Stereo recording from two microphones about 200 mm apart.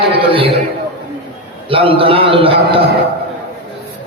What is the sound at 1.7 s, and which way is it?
Speech, 25° right (ahead or behind).